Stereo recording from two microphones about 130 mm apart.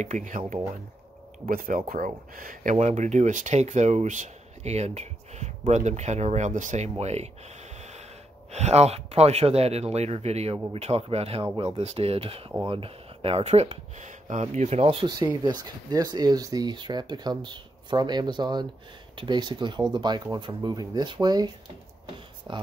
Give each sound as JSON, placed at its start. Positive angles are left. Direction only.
{"t": 0.0, "sound": "speech", "side_deg": -75}
{"t": 1.5, "sound": "speech", "side_deg": -90}
{"t": 8.5, "sound": "speech", "side_deg": -55}
{"t": 15.0, "sound": "speech", "side_deg": -30}